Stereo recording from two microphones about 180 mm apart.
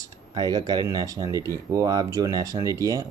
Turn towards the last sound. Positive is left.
turn(degrees=-20)  # may be behind; listen again after turning